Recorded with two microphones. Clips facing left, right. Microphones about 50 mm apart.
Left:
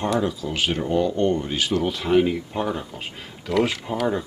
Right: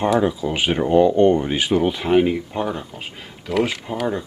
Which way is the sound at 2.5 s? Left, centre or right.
Centre.